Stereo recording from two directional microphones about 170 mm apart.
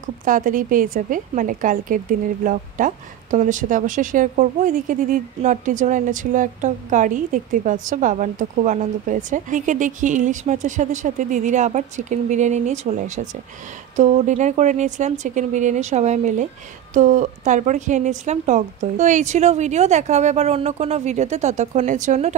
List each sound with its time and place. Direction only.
0.0 s a woman's voice: 50° right (ahead or behind)